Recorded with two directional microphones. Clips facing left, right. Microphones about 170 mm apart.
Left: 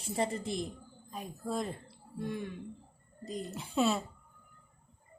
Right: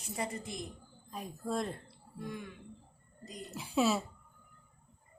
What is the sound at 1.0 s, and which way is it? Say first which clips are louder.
Speech: even; centre (ahead or behind).